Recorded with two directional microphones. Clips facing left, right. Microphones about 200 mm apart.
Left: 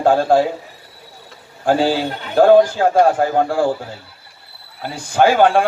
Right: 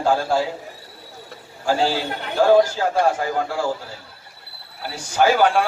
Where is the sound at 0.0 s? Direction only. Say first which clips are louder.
Left 6 dB; 55° left (ahead or behind).